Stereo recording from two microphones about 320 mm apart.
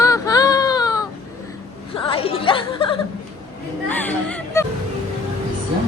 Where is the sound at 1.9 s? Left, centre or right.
Centre.